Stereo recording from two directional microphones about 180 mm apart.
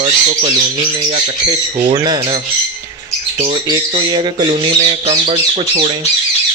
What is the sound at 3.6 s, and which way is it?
Speech, 25° right (ahead or behind).